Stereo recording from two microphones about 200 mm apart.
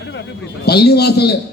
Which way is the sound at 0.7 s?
55° left (ahead or behind).